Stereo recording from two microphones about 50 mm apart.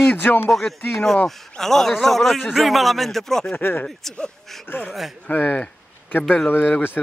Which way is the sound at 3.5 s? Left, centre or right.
Left.